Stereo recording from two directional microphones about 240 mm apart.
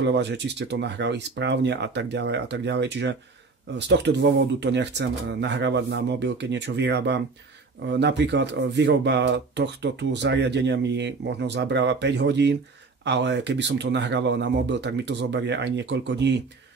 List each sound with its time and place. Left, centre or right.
0.0 s speech: right